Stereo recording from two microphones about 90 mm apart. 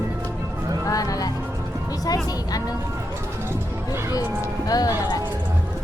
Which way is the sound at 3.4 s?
30° right (ahead or behind).